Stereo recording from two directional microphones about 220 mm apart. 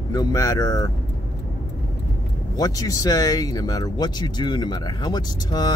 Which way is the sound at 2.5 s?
15° left (ahead or behind).